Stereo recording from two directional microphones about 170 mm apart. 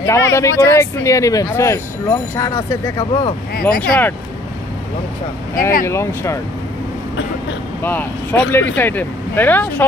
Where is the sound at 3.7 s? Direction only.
5° left (ahead or behind).